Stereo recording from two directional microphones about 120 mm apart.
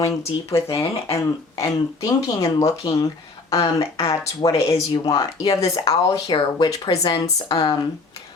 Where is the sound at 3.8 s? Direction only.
55° left (ahead or behind).